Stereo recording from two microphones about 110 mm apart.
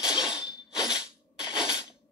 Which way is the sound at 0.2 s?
5° right (ahead or behind).